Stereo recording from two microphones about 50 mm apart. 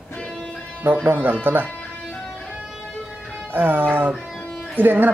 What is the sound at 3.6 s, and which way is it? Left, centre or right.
Speech, right.